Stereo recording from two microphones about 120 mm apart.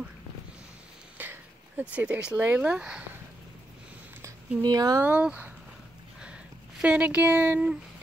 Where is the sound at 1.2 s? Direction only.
15° right (ahead or behind).